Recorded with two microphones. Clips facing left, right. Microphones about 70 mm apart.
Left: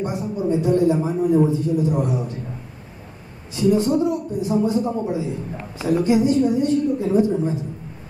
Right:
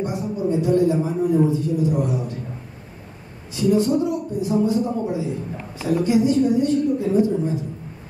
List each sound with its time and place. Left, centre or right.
0.0 s a man's voice: left
3.5 s a man's voice: left